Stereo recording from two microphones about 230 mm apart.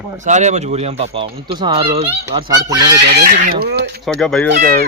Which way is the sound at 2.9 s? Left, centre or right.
Right.